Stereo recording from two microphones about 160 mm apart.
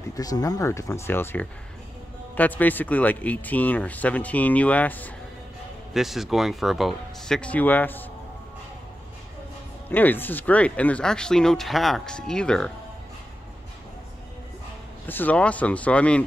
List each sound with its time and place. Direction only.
0.1 s speech: 20° left (ahead or behind)
5.9 s speech: centre (ahead or behind)
9.8 s speech: 10° left (ahead or behind)
15.0 s speech: 10° left (ahead or behind)